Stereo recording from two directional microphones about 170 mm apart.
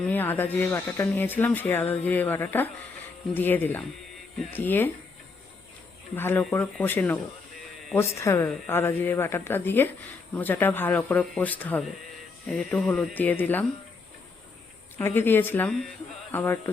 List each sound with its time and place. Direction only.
0.0 s speech: 10° left (ahead or behind)
6.1 s speech: 15° left (ahead or behind)
14.9 s speech: 10° left (ahead or behind)